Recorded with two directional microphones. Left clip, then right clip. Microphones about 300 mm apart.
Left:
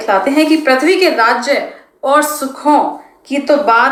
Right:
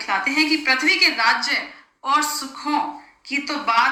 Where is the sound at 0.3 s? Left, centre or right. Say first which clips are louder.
Left 8 dB; centre.